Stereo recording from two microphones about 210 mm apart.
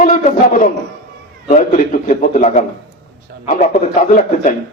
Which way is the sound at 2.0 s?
40° left (ahead or behind).